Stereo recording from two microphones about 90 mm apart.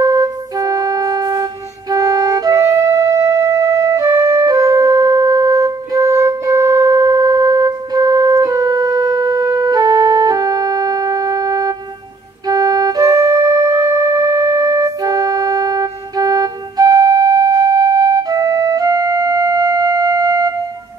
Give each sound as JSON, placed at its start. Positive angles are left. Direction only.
{"t": 0.0, "sound": "music", "side_deg": -40}